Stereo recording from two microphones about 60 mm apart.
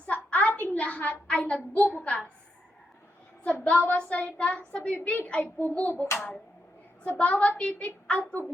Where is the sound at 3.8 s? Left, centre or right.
Centre.